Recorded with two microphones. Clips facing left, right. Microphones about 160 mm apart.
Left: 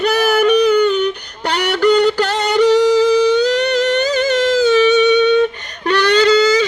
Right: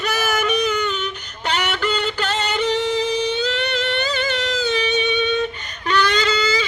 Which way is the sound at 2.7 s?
40° left (ahead or behind).